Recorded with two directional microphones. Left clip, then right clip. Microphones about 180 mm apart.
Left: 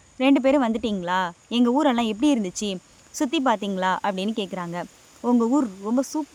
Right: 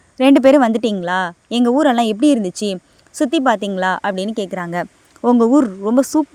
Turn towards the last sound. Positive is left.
turn(degrees=-35)  # may be behind; listen again after turning